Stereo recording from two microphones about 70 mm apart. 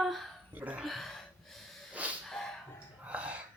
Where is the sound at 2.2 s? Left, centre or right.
Centre.